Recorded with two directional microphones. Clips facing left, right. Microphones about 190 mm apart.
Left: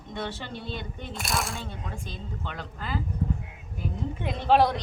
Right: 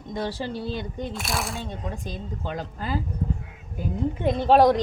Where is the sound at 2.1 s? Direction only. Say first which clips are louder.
Right 5 dB; 40° right (ahead or behind).